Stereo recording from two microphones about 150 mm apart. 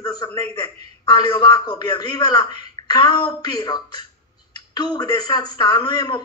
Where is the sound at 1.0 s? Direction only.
30° left (ahead or behind).